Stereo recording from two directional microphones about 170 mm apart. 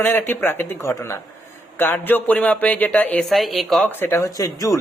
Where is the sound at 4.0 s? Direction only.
15° left (ahead or behind).